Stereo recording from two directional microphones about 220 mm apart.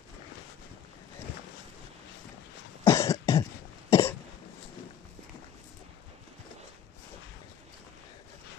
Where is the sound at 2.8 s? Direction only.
15° left (ahead or behind).